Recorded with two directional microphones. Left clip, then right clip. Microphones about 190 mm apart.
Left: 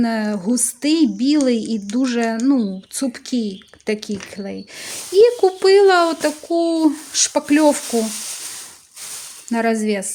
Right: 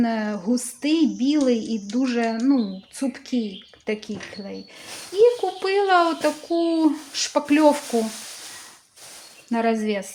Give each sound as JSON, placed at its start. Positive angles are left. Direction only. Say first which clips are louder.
{"t": 0.0, "sound": "a woman's voice", "louder": "left 3 dB", "side_deg": 35}
{"t": 9.5, "sound": "a woman's voice", "louder": "left 3 dB", "side_deg": 35}